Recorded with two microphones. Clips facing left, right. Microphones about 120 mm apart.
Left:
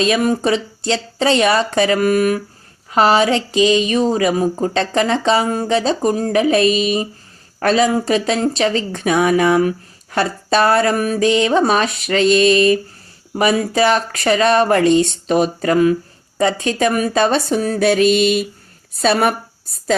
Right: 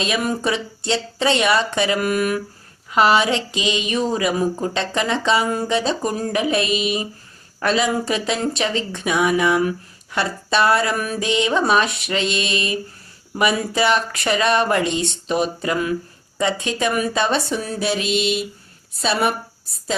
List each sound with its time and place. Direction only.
0.0 s a woman's voice: 35° left (ahead or behind)